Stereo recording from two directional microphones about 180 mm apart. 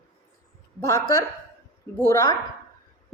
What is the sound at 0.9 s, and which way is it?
Speech, 15° left (ahead or behind).